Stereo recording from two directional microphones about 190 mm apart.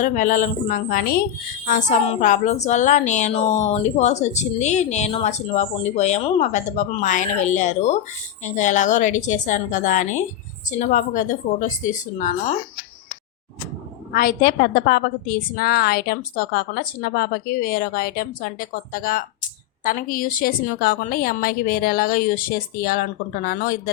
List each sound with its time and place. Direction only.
0.0 s a woman's voice: 45° left (ahead or behind)
14.1 s a woman's voice: 50° left (ahead or behind)